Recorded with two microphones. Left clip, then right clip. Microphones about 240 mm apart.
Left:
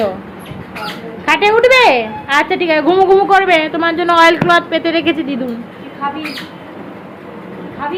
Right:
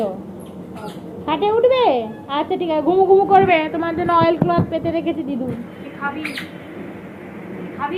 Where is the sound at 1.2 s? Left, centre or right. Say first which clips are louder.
Left 6 dB; centre.